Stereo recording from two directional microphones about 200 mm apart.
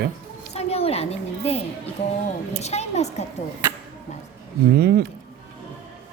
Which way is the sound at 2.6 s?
35° left (ahead or behind).